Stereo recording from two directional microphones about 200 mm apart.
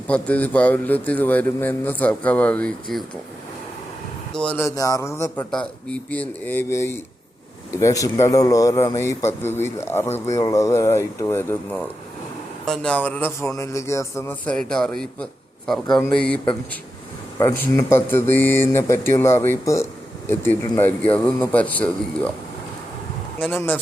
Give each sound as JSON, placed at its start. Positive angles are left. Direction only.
{"t": 0.1, "sound": "a man's voice", "side_deg": 5}
{"t": 4.4, "sound": "a man's voice", "side_deg": 10}
{"t": 12.6, "sound": "a man's voice", "side_deg": 5}
{"t": 17.4, "sound": "a man's voice", "side_deg": 10}
{"t": 23.4, "sound": "a man's voice", "side_deg": 10}